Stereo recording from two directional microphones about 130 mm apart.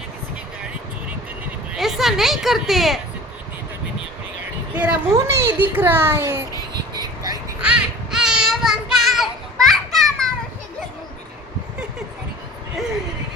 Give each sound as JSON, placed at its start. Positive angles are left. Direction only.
{"t": 1.7, "sound": "speech", "side_deg": 0}
{"t": 4.7, "sound": "speech", "side_deg": -10}
{"t": 5.1, "sound": "a child's voice", "side_deg": -20}
{"t": 7.6, "sound": "child singing", "side_deg": -5}